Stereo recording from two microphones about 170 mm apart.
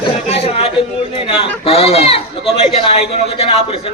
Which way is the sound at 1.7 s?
35° left (ahead or behind).